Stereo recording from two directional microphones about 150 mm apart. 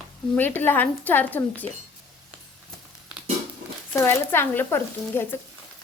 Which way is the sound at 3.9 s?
15° left (ahead or behind).